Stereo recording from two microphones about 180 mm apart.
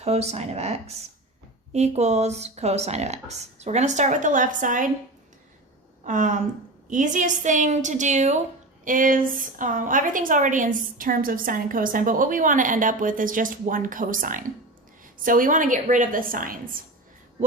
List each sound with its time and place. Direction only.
0.0 s speech: 35° right (ahead or behind)
6.1 s a woman's voice: 45° right (ahead or behind)